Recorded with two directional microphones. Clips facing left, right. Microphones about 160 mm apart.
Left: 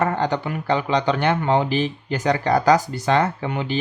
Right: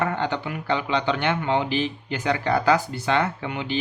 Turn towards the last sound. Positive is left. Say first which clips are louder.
# left 4 dB
turn(degrees=45)  # may be behind; listen again after turning